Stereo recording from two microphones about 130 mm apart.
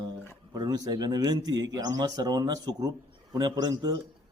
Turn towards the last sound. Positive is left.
turn(degrees=-30)  # may be behind; listen again after turning